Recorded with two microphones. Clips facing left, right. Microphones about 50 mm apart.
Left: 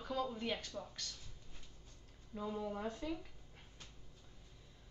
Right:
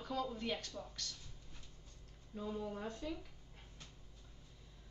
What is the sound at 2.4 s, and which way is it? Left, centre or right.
Speech, centre.